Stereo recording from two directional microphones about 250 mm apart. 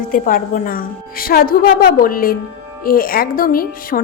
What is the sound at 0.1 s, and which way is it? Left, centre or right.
A woman's voice, left.